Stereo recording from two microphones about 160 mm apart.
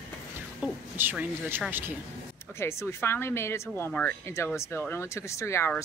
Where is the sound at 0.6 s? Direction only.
10° right (ahead or behind).